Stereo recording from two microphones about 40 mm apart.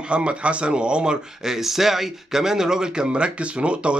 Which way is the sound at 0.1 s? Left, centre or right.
Right.